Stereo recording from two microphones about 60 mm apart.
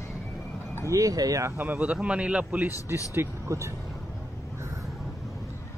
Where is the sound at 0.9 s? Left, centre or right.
Right.